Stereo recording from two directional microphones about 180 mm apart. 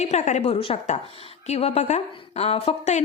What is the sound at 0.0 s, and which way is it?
Speech, 40° left (ahead or behind).